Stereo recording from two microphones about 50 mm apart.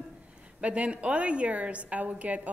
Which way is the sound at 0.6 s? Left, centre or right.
Right.